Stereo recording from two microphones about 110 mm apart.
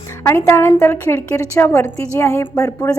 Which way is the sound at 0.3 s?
25° left (ahead or behind).